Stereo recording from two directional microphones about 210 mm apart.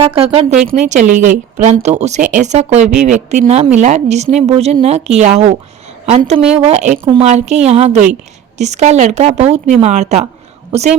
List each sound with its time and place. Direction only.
0.0 s a woman's voice: 25° right (ahead or behind)